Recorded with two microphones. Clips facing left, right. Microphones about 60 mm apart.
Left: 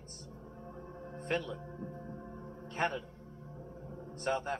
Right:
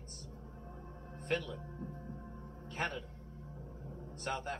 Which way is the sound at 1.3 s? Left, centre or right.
Centre.